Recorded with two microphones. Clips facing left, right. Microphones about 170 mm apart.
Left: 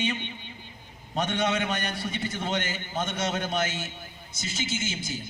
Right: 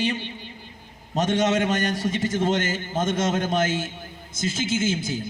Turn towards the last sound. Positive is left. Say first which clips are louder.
# right 9 dB
turn(degrees=-55)  # may be behind; listen again after turning